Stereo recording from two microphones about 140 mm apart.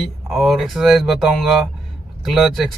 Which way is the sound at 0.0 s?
Centre (ahead or behind).